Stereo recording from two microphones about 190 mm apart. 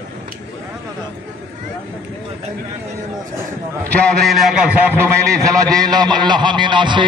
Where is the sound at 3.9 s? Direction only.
5° left (ahead or behind).